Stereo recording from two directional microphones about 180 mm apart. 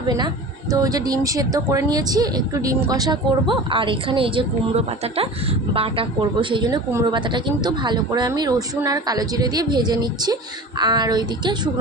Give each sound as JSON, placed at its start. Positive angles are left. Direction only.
{"t": 0.7, "sound": "speech", "side_deg": -20}